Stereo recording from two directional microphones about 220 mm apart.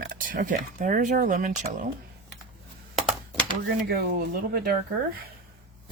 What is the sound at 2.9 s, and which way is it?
Computer keyboard, centre (ahead or behind).